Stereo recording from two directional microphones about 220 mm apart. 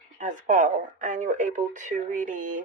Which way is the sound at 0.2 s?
35° right (ahead or behind).